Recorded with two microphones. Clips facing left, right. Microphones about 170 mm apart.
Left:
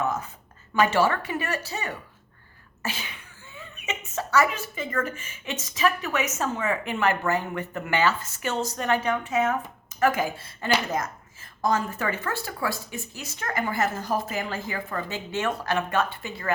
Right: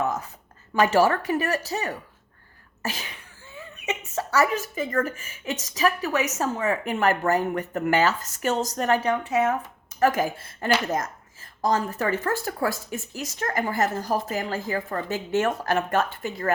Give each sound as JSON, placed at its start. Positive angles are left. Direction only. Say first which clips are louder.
{"t": 0.0, "sound": "speech", "louder": "right 1 dB", "side_deg": -35}